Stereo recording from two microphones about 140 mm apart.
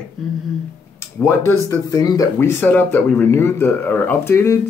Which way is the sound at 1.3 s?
15° left (ahead or behind).